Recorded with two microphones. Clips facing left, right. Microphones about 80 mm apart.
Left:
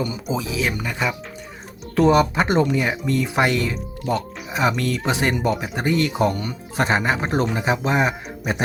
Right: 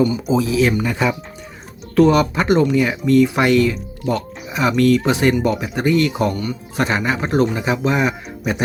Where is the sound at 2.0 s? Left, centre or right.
Left.